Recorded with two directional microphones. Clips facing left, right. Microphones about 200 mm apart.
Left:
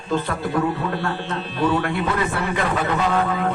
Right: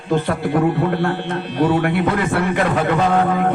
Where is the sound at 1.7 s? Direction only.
65° right (ahead or behind).